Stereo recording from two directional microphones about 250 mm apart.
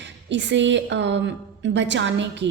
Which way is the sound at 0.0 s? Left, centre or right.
Right.